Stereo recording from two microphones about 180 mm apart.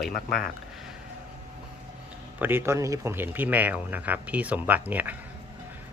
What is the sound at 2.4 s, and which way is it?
Speech, 10° right (ahead or behind).